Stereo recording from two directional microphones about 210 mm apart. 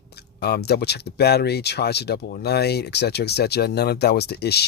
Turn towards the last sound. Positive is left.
turn(degrees=50)  # may be behind; listen again after turning